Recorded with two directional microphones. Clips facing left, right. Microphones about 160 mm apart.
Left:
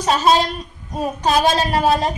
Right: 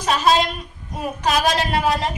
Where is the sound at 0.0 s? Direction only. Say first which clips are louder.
Left 2 dB; 25° left (ahead or behind).